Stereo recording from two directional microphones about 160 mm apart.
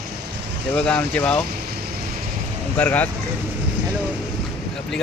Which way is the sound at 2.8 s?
10° left (ahead or behind).